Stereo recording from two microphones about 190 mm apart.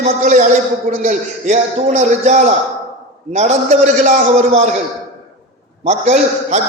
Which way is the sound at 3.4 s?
35° right (ahead or behind).